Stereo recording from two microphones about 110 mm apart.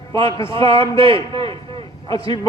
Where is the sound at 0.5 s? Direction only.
50° right (ahead or behind).